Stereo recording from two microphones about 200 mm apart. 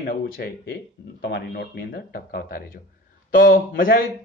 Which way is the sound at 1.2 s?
55° left (ahead or behind).